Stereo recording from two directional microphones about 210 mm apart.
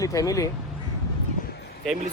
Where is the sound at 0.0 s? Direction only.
15° left (ahead or behind).